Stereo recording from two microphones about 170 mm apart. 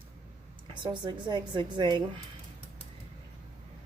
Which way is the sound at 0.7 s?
25° right (ahead or behind).